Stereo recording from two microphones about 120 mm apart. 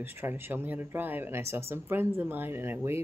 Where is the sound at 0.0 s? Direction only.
20° right (ahead or behind).